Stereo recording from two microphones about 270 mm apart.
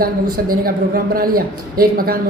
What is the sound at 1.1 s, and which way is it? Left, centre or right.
A man's voice, right.